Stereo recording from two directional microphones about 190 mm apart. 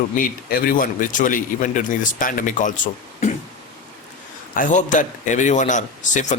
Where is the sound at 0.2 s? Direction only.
50° left (ahead or behind).